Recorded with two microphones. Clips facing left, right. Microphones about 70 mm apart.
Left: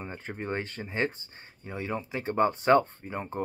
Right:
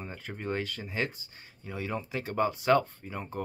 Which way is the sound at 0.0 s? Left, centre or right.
Left.